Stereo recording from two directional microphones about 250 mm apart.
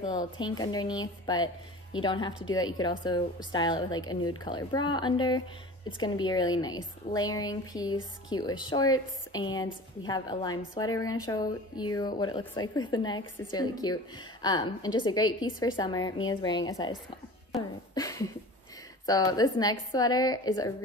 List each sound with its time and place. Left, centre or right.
0.0 s a woman's voice: centre